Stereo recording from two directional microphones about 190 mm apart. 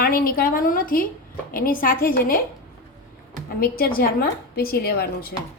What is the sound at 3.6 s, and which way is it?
A woman's voice, 50° left (ahead or behind).